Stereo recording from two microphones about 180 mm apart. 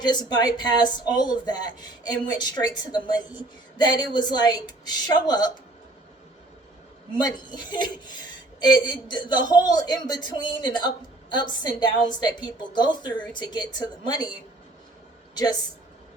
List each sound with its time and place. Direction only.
0.0 s speech: 25° left (ahead or behind)
7.3 s speech: 25° left (ahead or behind)